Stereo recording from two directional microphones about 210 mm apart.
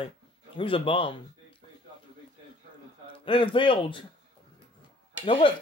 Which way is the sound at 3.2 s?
25° left (ahead or behind).